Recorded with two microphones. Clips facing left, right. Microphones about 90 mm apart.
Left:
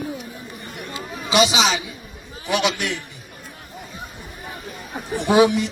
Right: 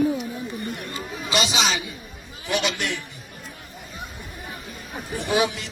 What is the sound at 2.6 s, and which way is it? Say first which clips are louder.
Speech: left 4 dB; 5° left (ahead or behind).